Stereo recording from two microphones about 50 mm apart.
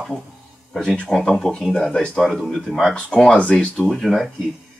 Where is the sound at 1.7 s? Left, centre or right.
Centre.